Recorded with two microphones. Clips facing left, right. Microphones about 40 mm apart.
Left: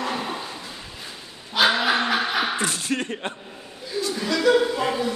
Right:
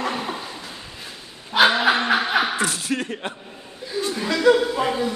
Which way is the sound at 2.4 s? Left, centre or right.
Centre.